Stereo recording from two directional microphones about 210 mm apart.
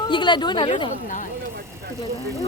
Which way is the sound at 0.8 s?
35° left (ahead or behind).